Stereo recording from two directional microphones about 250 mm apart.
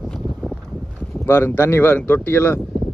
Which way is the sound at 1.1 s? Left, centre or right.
Centre.